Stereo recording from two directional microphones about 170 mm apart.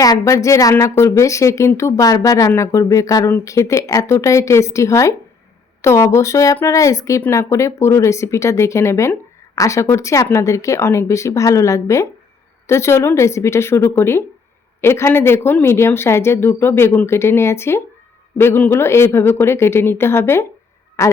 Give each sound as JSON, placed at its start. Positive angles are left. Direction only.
{"t": 0.0, "sound": "a woman's voice", "side_deg": 20}